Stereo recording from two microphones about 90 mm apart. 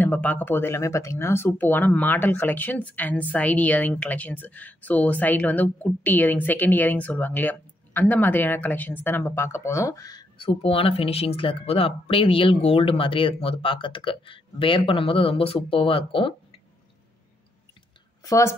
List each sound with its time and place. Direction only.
0.0 s speech: 20° left (ahead or behind); by 10.2 s 40° left (ahead or behind)
10.3 s speech: 85° left
18.2 s speech: 35° left (ahead or behind)